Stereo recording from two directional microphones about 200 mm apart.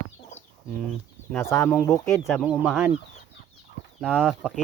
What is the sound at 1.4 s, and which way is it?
Speech, 10° left (ahead or behind).